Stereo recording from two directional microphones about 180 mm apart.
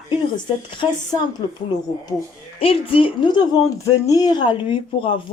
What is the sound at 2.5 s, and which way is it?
A woman's voice, 30° left (ahead or behind).